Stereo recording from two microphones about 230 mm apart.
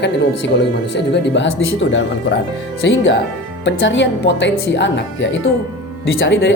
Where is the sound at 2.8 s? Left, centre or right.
Left.